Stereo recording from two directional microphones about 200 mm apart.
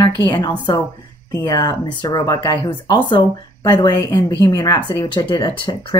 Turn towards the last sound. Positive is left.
turn(degrees=25)  # may be behind; listen again after turning